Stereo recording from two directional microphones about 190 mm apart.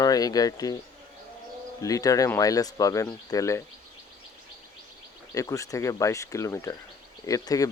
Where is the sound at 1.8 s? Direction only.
20° left (ahead or behind).